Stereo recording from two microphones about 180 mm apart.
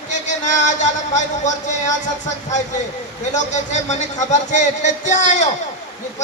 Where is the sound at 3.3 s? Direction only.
40° left (ahead or behind).